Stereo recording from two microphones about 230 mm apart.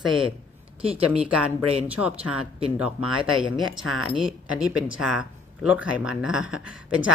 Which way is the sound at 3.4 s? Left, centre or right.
Centre.